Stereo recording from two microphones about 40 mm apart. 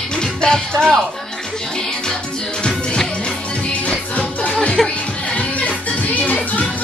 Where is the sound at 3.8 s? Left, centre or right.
Left.